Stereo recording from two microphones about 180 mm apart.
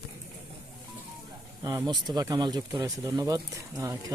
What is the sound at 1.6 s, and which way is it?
Speech, 20° right (ahead or behind).